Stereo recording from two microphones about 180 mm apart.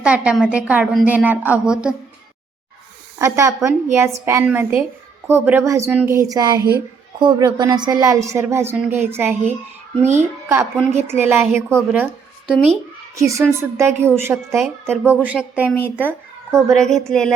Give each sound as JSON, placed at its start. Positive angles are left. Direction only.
{"t": 0.0, "sound": "a woman's voice", "side_deg": -5}
{"t": 3.2, "sound": "a woman's voice", "side_deg": -15}
{"t": 13.1, "sound": "a woman's voice", "side_deg": -15}
{"t": 16.7, "sound": "a woman's voice", "side_deg": 5}